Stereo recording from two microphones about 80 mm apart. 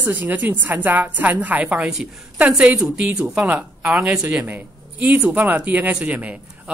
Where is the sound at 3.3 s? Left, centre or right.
Centre.